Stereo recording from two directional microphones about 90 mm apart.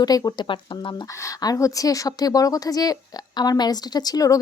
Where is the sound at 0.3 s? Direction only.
65° left (ahead or behind).